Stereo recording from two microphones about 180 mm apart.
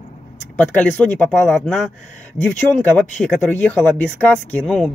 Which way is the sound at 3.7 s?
10° left (ahead or behind).